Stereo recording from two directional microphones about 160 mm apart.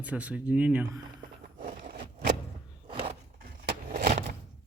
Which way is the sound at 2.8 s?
30° right (ahead or behind).